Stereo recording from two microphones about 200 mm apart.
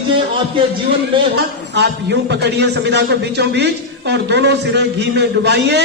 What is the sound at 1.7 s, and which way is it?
A man's voice, 60° right (ahead or behind).